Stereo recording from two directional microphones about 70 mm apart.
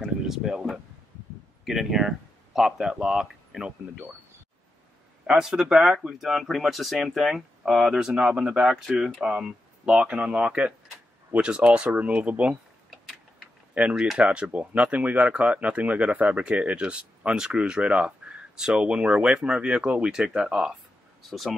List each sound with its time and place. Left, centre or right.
0.0 s a sound: centre
1.6 s speech: centre
5.2 s speech: centre
13.9 s speech: centre